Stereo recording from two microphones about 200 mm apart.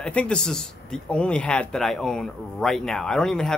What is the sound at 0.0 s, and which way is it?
Speech, 5° left (ahead or behind).